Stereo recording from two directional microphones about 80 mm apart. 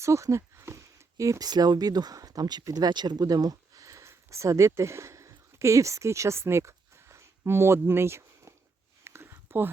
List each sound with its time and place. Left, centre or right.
0.0 s speech: right
1.5 s speech: right
9.0 s a sound: right